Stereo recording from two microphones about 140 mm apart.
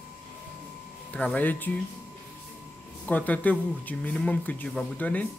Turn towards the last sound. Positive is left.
turn(degrees=10)  # may be behind; listen again after turning